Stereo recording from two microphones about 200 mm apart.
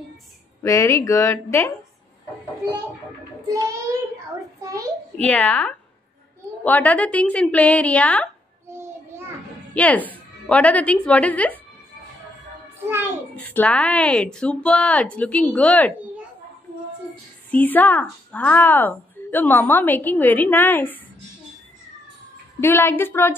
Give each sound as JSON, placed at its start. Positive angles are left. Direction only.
{"t": 0.6, "sound": "a woman's voice", "side_deg": 15}
{"t": 3.5, "sound": "a child's voice", "side_deg": -15}
{"t": 5.2, "sound": "a woman's voice", "side_deg": 10}
{"t": 9.8, "sound": "a woman's voice", "side_deg": 10}
{"t": 13.4, "sound": "a woman's voice", "side_deg": 10}
{"t": 17.5, "sound": "a woman's voice", "side_deg": 10}
{"t": 22.6, "sound": "a woman's voice", "side_deg": 10}